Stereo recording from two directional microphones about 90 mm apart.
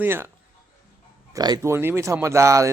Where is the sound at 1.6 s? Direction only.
25° right (ahead or behind).